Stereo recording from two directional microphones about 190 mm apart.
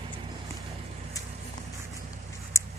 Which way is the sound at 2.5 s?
15° left (ahead or behind).